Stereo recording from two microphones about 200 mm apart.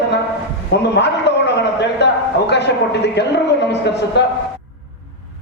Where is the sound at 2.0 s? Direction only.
60° left (ahead or behind).